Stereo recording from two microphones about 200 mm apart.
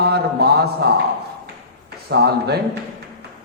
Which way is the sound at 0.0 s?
55° right (ahead or behind).